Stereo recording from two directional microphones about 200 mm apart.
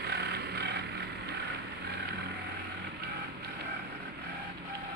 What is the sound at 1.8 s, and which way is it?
Vehicle, 55° right (ahead or behind).